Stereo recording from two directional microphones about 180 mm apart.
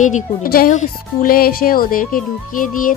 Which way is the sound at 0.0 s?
45° left (ahead or behind).